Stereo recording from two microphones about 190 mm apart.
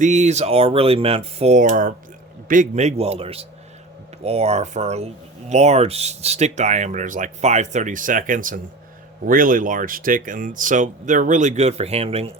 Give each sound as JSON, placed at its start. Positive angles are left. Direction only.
{"t": 0.0, "sound": "speech", "side_deg": -40}